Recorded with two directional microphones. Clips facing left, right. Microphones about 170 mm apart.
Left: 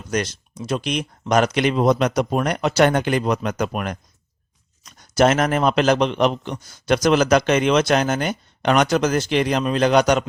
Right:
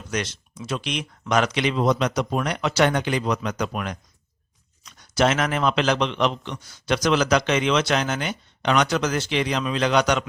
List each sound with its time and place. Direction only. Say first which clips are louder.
0.1 s a man's voice: left 5 dB; 40° left (ahead or behind)